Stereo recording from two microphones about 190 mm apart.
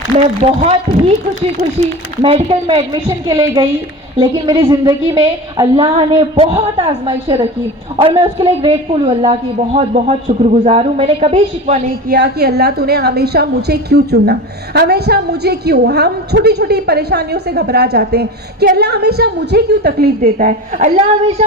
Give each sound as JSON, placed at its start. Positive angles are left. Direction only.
{"t": 0.6, "sound": "a man's voice", "side_deg": -30}
{"t": 12.0, "sound": "a woman's voice", "side_deg": -60}